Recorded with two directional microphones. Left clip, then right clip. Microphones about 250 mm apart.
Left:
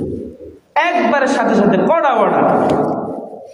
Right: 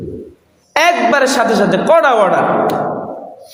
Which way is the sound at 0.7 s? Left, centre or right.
Right.